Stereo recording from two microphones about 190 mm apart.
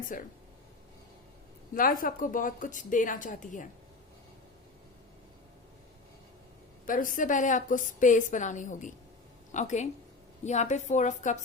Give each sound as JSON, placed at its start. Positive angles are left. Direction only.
{"t": 0.1, "sound": "a woman's voice", "side_deg": 45}
{"t": 1.7, "sound": "a woman's voice", "side_deg": 45}
{"t": 6.8, "sound": "a woman's voice", "side_deg": 45}